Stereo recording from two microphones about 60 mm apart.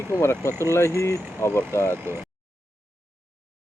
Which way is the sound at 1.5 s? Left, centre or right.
Left.